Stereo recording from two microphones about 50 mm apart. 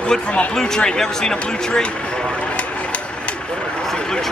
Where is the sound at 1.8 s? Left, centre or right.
Left.